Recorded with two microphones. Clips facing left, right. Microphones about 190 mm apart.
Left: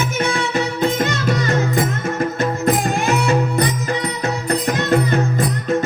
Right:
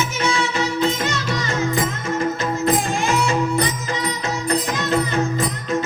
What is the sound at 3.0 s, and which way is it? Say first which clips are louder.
Music: left 2 dB; 60° left (ahead or behind).